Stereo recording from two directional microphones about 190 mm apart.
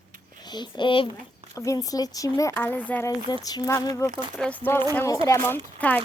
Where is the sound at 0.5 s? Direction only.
25° left (ahead or behind).